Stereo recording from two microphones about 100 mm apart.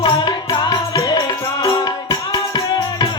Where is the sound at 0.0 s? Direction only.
50° left (ahead or behind).